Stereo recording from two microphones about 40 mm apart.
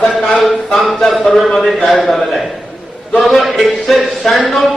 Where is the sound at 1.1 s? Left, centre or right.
Centre.